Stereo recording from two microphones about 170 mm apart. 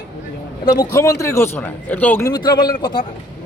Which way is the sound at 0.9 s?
15° left (ahead or behind).